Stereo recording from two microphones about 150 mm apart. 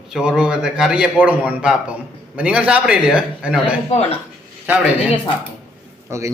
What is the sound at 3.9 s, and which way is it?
Speech, 45° left (ahead or behind).